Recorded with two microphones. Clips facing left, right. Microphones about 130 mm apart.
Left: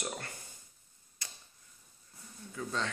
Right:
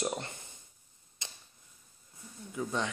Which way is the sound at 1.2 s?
20° right (ahead or behind).